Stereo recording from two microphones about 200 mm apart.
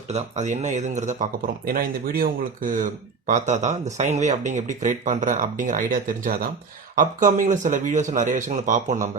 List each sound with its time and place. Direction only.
0.1 s speech: 35° right (ahead or behind)